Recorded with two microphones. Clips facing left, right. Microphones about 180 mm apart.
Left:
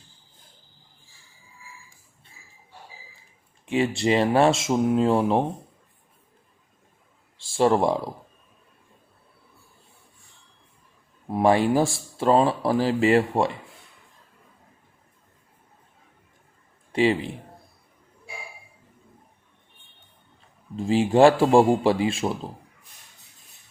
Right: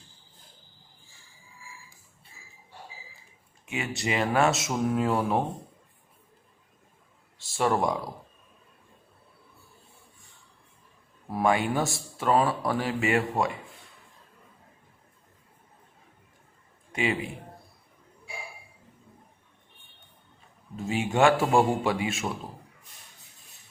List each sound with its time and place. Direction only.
3.7 s speech: 30° left (ahead or behind)
7.3 s speech: 30° left (ahead or behind)
11.3 s speech: 30° left (ahead or behind)
16.9 s a man's voice: 35° left (ahead or behind)
20.7 s speech: 30° left (ahead or behind)